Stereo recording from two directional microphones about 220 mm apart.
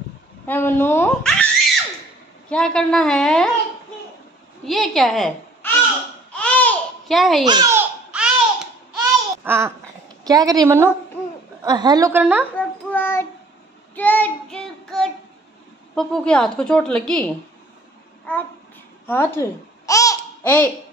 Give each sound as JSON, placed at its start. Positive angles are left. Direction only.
{"t": 0.5, "sound": "speech", "side_deg": 10}
{"t": 2.5, "sound": "a woman's voice", "side_deg": 5}
{"t": 4.6, "sound": "a child's voice", "side_deg": 0}
{"t": 6.3, "sound": "babbling", "side_deg": 5}
{"t": 7.4, "sound": "a woman's voice", "side_deg": -15}
{"t": 8.1, "sound": "babbling", "side_deg": -5}
{"t": 10.2, "sound": "a woman's voice", "side_deg": -15}
{"t": 12.5, "sound": "a sound", "side_deg": 10}
{"t": 13.9, "sound": "child singing", "side_deg": 10}
{"t": 15.9, "sound": "a woman's voice", "side_deg": 5}
{"t": 19.0, "sound": "speech", "side_deg": 10}
{"t": 19.9, "sound": "babbling", "side_deg": 15}